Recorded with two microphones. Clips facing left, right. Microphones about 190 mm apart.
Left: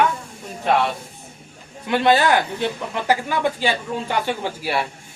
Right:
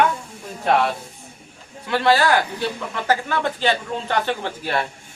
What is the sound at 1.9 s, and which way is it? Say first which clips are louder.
Speech: left 1 dB; 20° left (ahead or behind).